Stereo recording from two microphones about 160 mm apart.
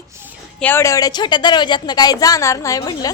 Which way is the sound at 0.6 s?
15° left (ahead or behind).